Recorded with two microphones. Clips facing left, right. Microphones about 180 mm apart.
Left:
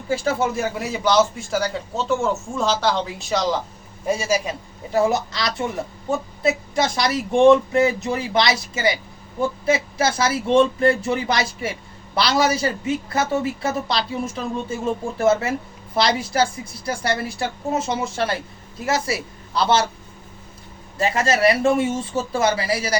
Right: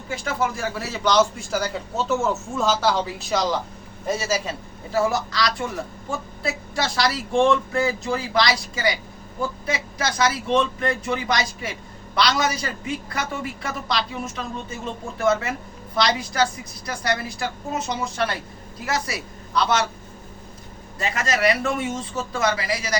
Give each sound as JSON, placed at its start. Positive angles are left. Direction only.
{"t": 0.1, "sound": "a man's voice", "side_deg": 25}
{"t": 4.0, "sound": "a man's voice", "side_deg": 10}
{"t": 21.0, "sound": "speech", "side_deg": 30}